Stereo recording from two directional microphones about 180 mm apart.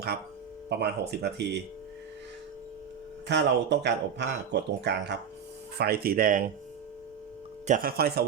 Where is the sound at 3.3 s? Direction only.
70° right (ahead or behind).